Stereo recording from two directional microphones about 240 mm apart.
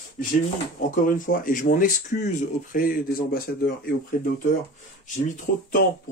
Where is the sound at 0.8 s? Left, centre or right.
Left.